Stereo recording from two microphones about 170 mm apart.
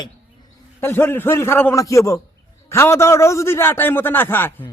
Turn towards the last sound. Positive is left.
turn(degrees=10)  # may be behind; listen again after turning